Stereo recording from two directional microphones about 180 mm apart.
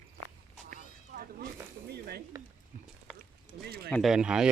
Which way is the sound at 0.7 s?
50° right (ahead or behind).